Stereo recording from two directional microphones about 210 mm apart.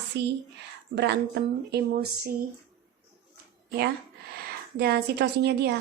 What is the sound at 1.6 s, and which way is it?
Speech, 50° right (ahead or behind).